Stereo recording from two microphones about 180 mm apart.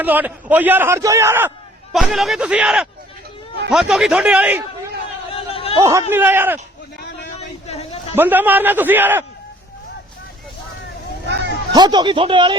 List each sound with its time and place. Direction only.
0.0 s a man's voice: 10° right (ahead or behind)
1.9 s speech: centre (ahead or behind)
5.3 s a sound: 30° left (ahead or behind)
5.7 s a man's voice: 15° right (ahead or behind)
7.3 s a sound: 35° left (ahead or behind)
8.1 s a man's voice: 10° right (ahead or behind)
11.7 s speech: 25° right (ahead or behind)